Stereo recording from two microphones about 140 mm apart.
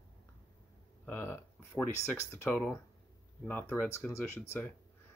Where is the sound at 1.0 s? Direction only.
15° left (ahead or behind).